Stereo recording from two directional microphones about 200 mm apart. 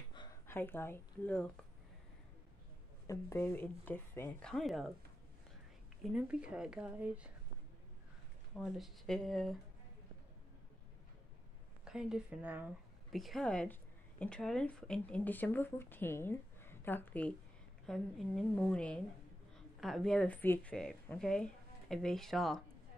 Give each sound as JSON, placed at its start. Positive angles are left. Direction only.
{"t": 0.1, "sound": "a sound", "side_deg": 25}
{"t": 0.5, "sound": "speech", "side_deg": 10}
{"t": 3.1, "sound": "speech", "side_deg": 15}
{"t": 6.1, "sound": "a woman's voice", "side_deg": -5}
{"t": 8.5, "sound": "a woman's voice", "side_deg": 0}
{"t": 11.8, "sound": "a woman's voice", "side_deg": -5}